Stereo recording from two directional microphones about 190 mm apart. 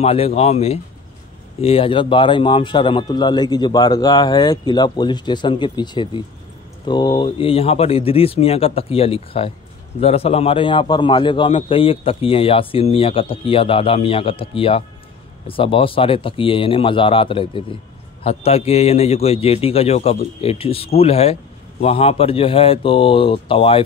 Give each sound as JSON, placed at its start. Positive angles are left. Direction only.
{"t": 0.0, "sound": "a man's voice", "side_deg": 30}